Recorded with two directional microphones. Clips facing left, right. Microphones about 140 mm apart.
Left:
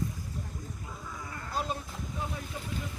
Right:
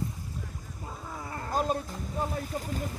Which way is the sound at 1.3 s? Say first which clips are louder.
Right 6 dB; 40° right (ahead or behind).